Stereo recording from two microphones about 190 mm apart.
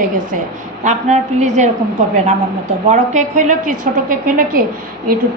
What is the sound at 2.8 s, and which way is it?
A woman's voice, 40° right (ahead or behind).